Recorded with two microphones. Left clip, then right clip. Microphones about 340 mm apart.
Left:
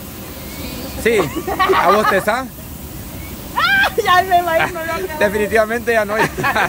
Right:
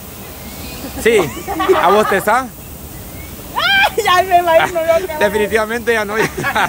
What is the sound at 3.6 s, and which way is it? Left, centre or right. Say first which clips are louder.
Vehicle: right 1 dB; right.